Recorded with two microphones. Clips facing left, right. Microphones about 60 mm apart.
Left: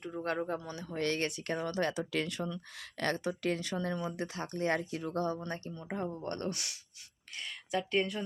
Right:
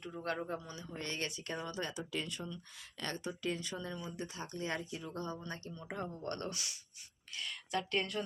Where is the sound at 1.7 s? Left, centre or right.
Left.